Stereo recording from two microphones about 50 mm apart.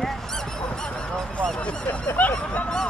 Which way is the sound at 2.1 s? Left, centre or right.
Left.